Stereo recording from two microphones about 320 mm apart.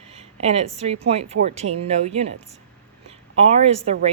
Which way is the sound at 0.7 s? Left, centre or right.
Centre.